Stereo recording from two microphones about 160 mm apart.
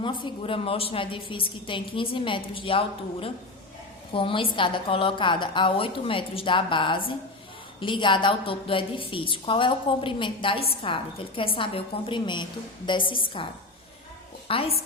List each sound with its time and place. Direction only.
0.0 s a woman's voice: 30° left (ahead or behind)